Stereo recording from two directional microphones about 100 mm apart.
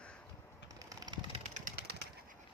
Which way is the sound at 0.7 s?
35° right (ahead or behind).